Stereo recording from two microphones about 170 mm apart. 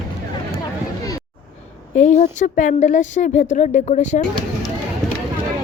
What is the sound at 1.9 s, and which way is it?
A woman's voice, 45° left (ahead or behind).